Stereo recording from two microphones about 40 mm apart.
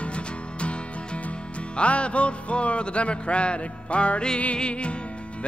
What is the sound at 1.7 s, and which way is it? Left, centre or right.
Music, left.